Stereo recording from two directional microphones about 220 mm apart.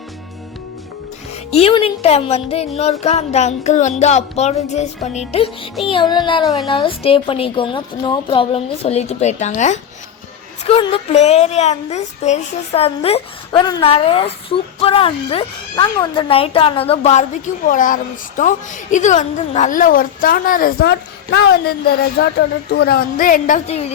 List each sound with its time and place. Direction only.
1.5 s speech: 25° left (ahead or behind)
6.4 s a woman's voice: centre (ahead or behind)
6.7 s speech: 25° left (ahead or behind)